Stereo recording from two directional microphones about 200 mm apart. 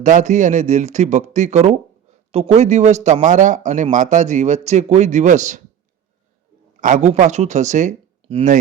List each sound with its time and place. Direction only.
0.0 s speech: 40° right (ahead or behind)
6.8 s speech: 35° right (ahead or behind)